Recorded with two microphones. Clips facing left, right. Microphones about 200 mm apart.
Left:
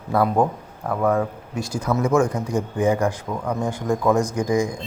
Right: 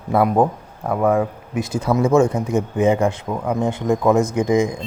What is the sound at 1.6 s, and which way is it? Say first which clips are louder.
Speech: right 4 dB; 20° right (ahead or behind).